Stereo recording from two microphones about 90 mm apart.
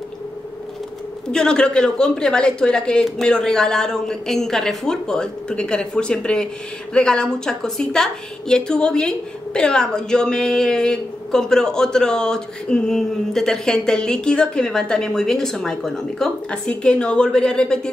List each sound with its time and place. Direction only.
1.3 s speech: 10° left (ahead or behind)